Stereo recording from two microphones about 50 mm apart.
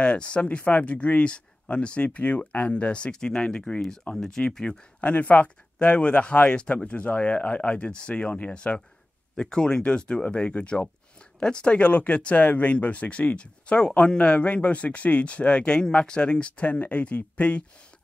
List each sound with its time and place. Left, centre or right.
0.0 s speech: left
13.7 s speech: centre